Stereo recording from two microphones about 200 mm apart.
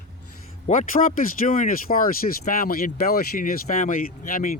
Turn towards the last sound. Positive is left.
turn(degrees=45)  # may be behind; listen again after turning